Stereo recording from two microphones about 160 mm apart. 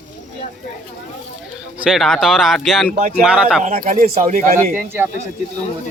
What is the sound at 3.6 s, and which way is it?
Speech, 55° right (ahead or behind).